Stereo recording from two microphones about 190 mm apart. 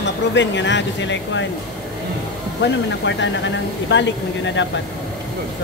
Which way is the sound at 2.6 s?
70° left (ahead or behind).